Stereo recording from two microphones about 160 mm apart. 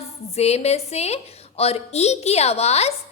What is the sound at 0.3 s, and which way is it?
A woman's voice, 40° left (ahead or behind).